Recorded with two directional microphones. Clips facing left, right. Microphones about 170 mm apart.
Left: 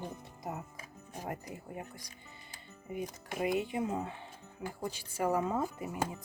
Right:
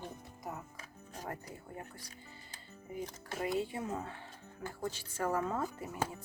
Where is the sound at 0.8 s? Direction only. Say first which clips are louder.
Left 2 dB; 10° left (ahead or behind).